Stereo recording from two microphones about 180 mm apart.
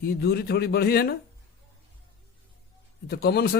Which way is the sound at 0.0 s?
60° left (ahead or behind).